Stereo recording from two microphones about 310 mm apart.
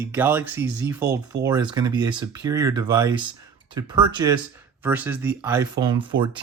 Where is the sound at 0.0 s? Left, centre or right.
Centre.